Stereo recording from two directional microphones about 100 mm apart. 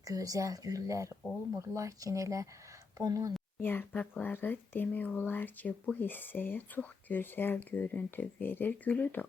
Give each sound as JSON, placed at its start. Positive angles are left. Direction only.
{"t": 0.0, "sound": "speech", "side_deg": -35}
{"t": 3.6, "sound": "speech", "side_deg": 20}